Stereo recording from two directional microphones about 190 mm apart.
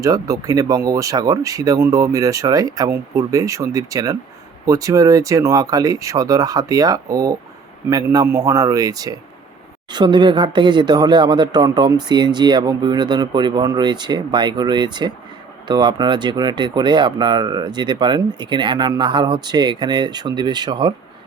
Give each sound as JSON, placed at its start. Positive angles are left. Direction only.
{"t": 0.0, "sound": "speech", "side_deg": -20}